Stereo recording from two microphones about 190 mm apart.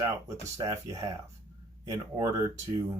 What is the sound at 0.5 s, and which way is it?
Speech, 15° right (ahead or behind).